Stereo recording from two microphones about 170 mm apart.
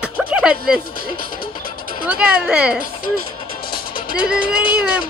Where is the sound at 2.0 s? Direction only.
5° right (ahead or behind).